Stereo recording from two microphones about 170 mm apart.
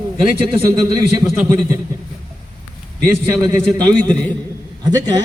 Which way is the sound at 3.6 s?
5° left (ahead or behind).